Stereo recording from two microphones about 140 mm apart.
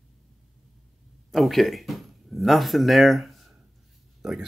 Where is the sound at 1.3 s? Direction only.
Centre (ahead or behind).